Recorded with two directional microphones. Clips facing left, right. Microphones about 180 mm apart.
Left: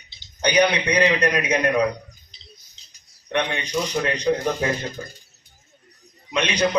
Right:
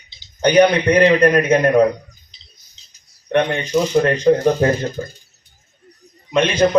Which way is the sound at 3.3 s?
50° right (ahead or behind).